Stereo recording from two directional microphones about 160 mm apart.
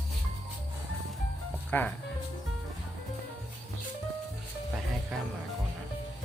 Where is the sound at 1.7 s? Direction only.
10° left (ahead or behind).